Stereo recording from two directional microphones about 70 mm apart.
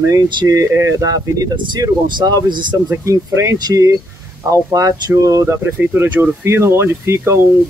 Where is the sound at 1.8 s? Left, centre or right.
Right.